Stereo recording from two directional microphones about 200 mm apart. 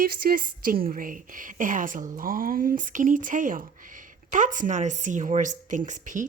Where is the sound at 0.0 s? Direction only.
45° right (ahead or behind).